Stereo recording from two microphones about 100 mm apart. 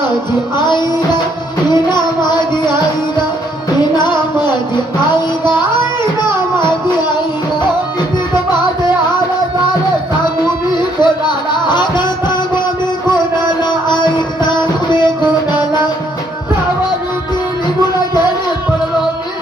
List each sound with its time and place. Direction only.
0.5 s music: 45° left (ahead or behind)
3.9 s music: 50° left (ahead or behind)
6.6 s music: 50° left (ahead or behind)
10.7 s music: 50° left (ahead or behind)
13.6 s music: 50° left (ahead or behind)